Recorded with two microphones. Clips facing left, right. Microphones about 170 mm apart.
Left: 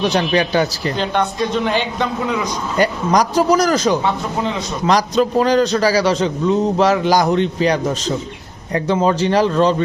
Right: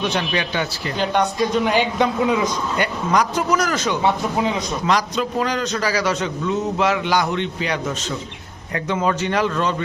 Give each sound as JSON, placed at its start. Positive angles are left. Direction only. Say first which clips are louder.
{"t": 0.0, "sound": "a man's voice", "louder": "left 6 dB", "side_deg": 35}
{"t": 1.6, "sound": "a man's voice", "louder": "right 1 dB", "side_deg": -10}
{"t": 2.7, "sound": "a man's voice", "louder": "left 6 dB", "side_deg": 40}